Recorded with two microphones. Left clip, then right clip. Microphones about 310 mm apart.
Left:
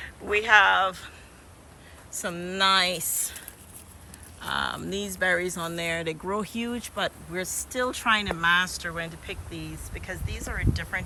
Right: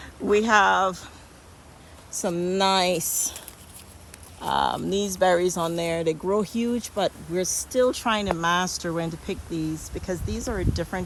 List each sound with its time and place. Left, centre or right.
0.0 s speech: centre
2.2 s speech: centre